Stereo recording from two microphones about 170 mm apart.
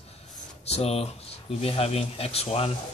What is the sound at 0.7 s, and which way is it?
Speech, 40° left (ahead or behind).